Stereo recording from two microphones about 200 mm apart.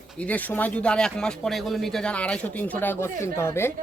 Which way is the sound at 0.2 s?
10° left (ahead or behind).